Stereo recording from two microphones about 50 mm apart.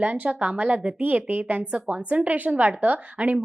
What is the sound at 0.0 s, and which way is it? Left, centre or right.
A woman's voice, right.